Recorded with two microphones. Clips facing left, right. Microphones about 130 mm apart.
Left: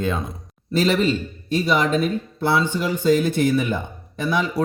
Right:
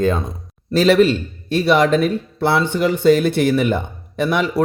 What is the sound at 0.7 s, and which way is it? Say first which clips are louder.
A man's voice: right 6 dB; 75° right (ahead or behind).